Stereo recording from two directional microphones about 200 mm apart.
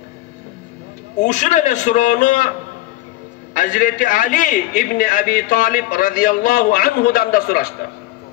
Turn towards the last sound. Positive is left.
turn(degrees=45)  # may be behind; listen again after turning